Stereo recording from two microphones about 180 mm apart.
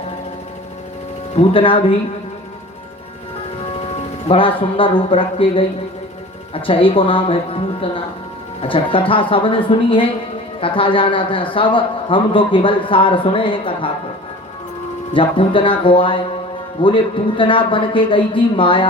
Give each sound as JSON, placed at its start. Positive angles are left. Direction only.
{"t": 1.3, "sound": "a man's voice", "side_deg": 30}
{"t": 4.3, "sound": "a man's voice", "side_deg": 30}
{"t": 15.1, "sound": "a man's voice", "side_deg": 30}